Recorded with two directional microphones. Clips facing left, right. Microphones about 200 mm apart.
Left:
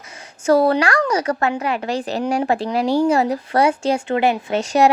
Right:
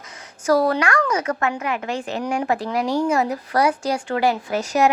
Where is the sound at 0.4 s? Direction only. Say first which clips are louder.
Left 3 dB; 25° left (ahead or behind).